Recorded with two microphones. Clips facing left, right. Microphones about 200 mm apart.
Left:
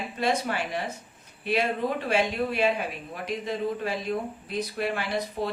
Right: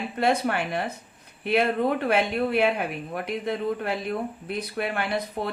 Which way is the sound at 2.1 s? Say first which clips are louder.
Right 2 dB; 60° right (ahead or behind).